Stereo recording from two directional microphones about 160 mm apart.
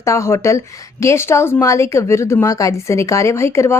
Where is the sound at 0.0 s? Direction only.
20° left (ahead or behind).